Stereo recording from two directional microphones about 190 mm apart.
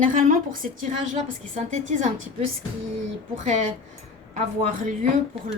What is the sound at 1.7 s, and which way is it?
Speech, 40° right (ahead or behind).